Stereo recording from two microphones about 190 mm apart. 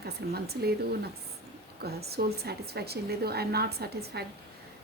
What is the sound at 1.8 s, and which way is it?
A woman's voice, 55° right (ahead or behind).